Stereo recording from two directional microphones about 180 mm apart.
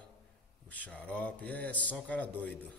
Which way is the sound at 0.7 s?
10° left (ahead or behind).